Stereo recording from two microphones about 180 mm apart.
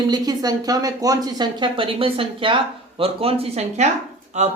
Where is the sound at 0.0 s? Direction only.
20° right (ahead or behind).